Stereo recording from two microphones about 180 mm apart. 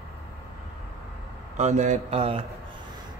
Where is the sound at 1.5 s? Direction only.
40° right (ahead or behind).